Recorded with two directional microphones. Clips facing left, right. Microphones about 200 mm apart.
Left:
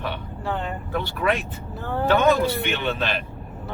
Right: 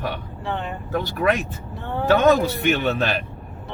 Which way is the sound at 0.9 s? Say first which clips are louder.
Right 3 dB; 45° right (ahead or behind).